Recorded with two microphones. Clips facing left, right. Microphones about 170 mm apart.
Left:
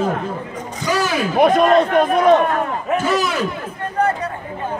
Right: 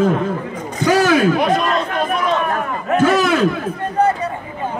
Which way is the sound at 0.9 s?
55° right (ahead or behind).